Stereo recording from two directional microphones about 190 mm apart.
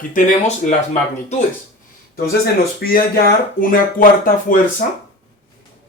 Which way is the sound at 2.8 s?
50° left (ahead or behind).